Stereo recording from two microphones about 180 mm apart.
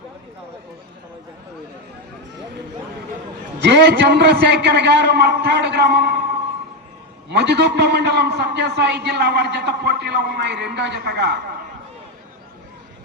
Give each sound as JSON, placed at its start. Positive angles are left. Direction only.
{"t": 3.6, "sound": "a man's voice", "side_deg": -70}
{"t": 7.3, "sound": "a man's voice", "side_deg": -65}